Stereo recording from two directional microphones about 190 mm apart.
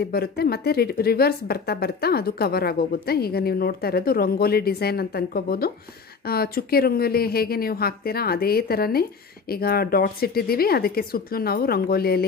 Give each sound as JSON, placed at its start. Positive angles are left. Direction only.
{"t": 0.0, "sound": "speech", "side_deg": 55}